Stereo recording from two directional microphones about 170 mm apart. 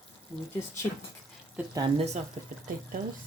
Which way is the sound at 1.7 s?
25° right (ahead or behind).